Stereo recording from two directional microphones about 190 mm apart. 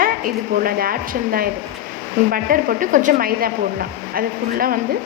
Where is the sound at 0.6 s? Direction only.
50° right (ahead or behind).